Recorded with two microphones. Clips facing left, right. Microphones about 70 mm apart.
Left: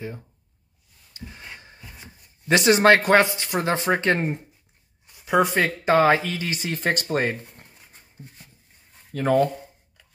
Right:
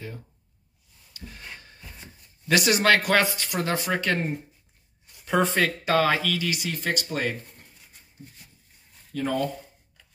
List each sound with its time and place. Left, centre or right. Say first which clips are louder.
1.1 s a sound: left 2 dB; left
2.4 s speech: left 5 dB; left
5.2 s speech: left 3 dB; centre; by 8.0 s left
9.1 s speech: left 7 dB; left